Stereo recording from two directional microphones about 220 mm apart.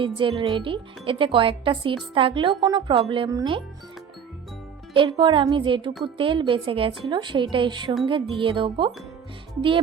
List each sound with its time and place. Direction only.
0.0 s speech: 25° right (ahead or behind)
4.9 s speech: 20° right (ahead or behind)